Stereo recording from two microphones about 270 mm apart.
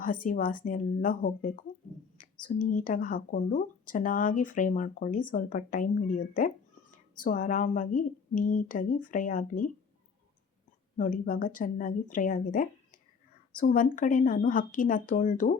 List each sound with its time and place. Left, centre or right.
0.0 s speech: left
10.9 s speech: left